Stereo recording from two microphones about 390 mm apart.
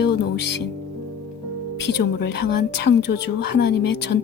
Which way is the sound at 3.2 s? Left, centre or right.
Left.